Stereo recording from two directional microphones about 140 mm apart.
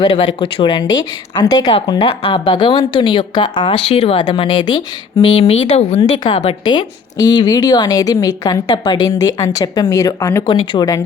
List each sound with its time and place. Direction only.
0.0 s a woman's voice: 40° left (ahead or behind)
4.2 s a woman's voice: 30° left (ahead or behind)
5.2 s speech: 45° left (ahead or behind); by 11.0 s 25° left (ahead or behind)